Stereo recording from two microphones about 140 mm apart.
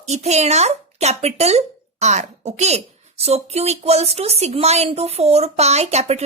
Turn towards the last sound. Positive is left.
turn(degrees=-50)  # may be behind; listen again after turning